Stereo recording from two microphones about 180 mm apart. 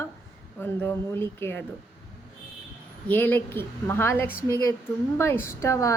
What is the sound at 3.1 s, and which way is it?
A woman's voice, 10° left (ahead or behind).